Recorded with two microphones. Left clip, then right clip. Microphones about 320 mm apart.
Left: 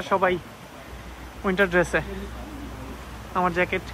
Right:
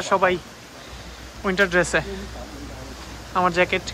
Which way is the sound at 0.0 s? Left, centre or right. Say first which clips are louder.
Right 3 dB; centre.